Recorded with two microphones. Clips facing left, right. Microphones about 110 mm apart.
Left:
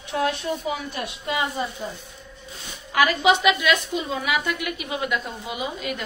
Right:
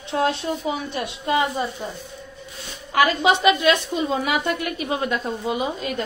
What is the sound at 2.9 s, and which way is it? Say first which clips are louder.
A woman's voice: right 1 dB; 30° right (ahead or behind).